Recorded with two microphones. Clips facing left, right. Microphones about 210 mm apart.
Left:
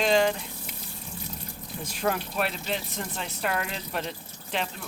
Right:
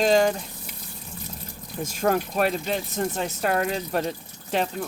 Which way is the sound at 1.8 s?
45° right (ahead or behind).